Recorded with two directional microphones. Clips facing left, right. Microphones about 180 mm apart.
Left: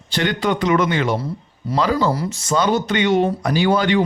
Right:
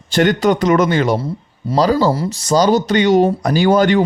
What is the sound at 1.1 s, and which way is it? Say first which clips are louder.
Speech: right 3 dB; 30° right (ahead or behind).